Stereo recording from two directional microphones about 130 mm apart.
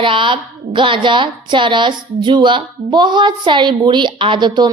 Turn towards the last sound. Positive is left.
turn(degrees=-35)  # may be behind; listen again after turning